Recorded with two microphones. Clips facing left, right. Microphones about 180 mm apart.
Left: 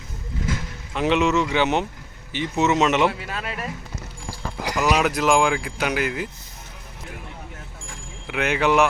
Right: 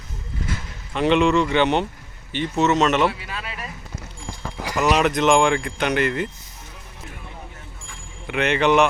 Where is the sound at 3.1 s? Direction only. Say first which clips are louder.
Left 2 dB; 50° left (ahead or behind).